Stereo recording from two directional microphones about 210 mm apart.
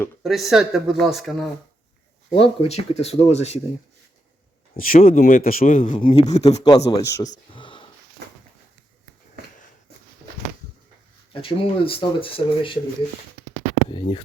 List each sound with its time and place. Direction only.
0.2 s speech: centre (ahead or behind)
2.4 s speech: 30° left (ahead or behind)
4.7 s speech: 40° left (ahead or behind)
6.0 s speech: 25° left (ahead or behind)
6.7 s a man's voice: 15° left (ahead or behind)
7.3 s a sound: 25° left (ahead or behind)
11.3 s speech: 25° left (ahead or behind)
13.9 s speech: 25° left (ahead or behind)